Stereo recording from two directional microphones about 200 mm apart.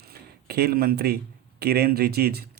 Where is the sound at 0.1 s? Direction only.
50° right (ahead or behind).